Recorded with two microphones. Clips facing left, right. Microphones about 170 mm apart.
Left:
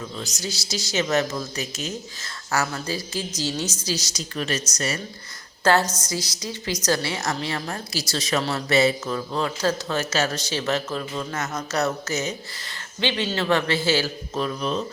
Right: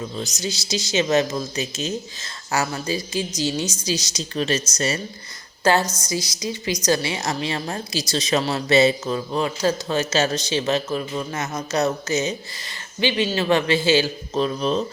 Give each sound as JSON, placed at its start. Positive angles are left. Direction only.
{"t": 0.2, "sound": "speech", "side_deg": -20}
{"t": 5.8, "sound": "a woman's voice", "side_deg": 10}
{"t": 6.1, "sound": "a woman's voice", "side_deg": -15}